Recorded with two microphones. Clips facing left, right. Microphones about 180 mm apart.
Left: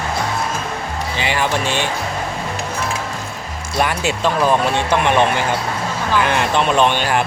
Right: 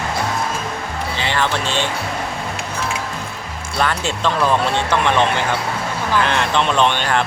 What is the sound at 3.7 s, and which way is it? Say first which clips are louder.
Speech: left 2 dB; 10° left (ahead or behind).